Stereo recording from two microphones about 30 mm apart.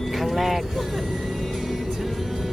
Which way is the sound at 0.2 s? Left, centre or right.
Centre.